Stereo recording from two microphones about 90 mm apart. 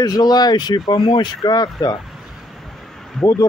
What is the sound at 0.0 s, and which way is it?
Speech, 45° left (ahead or behind).